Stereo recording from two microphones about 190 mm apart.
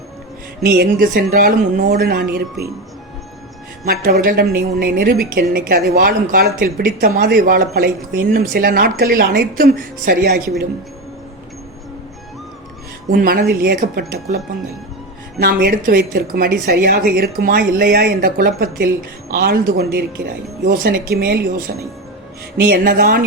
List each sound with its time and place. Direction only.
0.6 s a woman's voice: 50° right (ahead or behind)
3.8 s a woman's voice: 50° right (ahead or behind)
13.1 s a woman's voice: 50° right (ahead or behind)